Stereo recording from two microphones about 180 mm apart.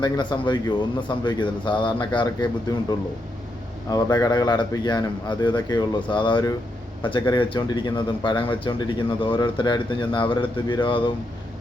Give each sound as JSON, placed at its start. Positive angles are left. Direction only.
{"t": 0.0, "sound": "speech", "side_deg": 25}
{"t": 3.8, "sound": "speech", "side_deg": 20}